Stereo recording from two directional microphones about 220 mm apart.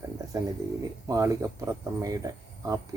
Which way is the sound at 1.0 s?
15° right (ahead or behind).